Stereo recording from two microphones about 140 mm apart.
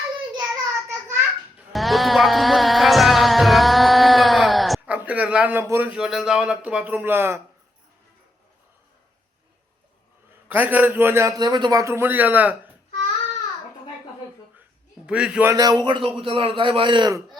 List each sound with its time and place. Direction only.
0.3 s a sound: 25° right (ahead or behind)
1.7 s music: centre (ahead or behind)
4.9 s a man's voice: 10° right (ahead or behind)
10.5 s a man's voice: 10° right (ahead or behind)
15.0 s a man's voice: 5° right (ahead or behind)
15.5 s a man's voice: 30° right (ahead or behind)